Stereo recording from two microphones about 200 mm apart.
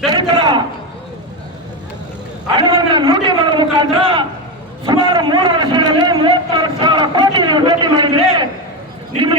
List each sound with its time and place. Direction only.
0.1 s a man's voice: 20° right (ahead or behind)
2.6 s a man's voice: 20° right (ahead or behind)
4.9 s a sound: 25° right (ahead or behind)